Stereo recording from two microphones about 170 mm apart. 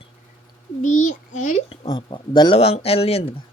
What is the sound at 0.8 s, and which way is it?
Child singing, 45° left (ahead or behind).